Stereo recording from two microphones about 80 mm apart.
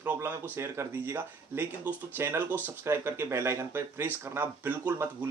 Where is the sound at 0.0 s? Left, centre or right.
Right.